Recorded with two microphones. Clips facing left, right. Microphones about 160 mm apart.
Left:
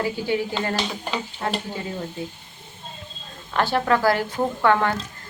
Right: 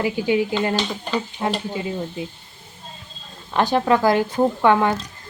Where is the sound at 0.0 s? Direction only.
15° right (ahead or behind).